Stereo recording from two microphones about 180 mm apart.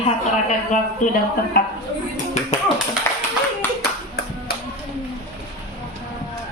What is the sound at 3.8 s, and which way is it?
Clapping, 60° left (ahead or behind).